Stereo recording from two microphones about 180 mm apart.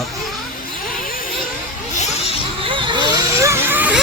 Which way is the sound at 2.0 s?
35° left (ahead or behind).